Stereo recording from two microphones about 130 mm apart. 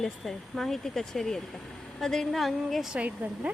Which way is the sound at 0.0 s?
Centre (ahead or behind).